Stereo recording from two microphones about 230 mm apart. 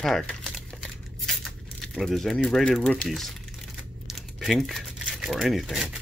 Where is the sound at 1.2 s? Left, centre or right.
Centre.